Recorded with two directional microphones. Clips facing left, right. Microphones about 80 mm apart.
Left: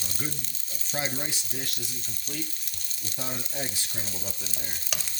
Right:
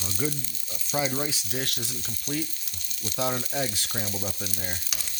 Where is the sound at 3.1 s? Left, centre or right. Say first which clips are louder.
Right 7 dB; right.